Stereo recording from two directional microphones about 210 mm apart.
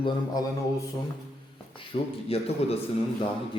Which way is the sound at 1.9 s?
30° left (ahead or behind).